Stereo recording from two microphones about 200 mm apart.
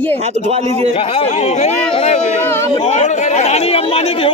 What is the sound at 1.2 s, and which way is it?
Speech, 35° left (ahead or behind).